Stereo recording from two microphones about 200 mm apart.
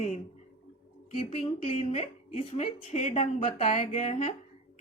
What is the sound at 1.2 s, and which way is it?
A woman's voice, 35° left (ahead or behind).